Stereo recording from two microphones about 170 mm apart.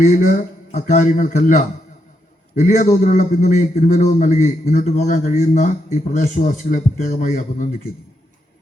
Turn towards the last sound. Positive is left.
turn(degrees=50)  # may be behind; listen again after turning